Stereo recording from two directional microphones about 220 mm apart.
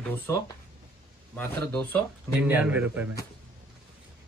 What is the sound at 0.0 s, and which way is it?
Speech, 10° left (ahead or behind).